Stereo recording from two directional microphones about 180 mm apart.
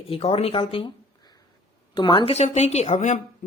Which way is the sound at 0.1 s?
30° left (ahead or behind).